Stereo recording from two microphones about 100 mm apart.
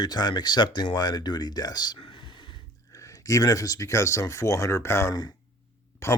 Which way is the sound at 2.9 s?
35° left (ahead or behind).